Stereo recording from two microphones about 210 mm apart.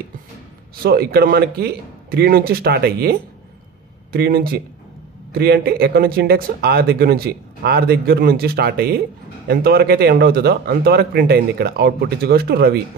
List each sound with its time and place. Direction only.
0.8 s speech: 45° right (ahead or behind)